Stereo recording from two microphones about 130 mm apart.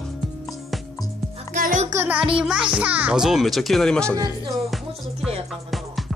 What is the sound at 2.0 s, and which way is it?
A child's voice, 10° right (ahead or behind).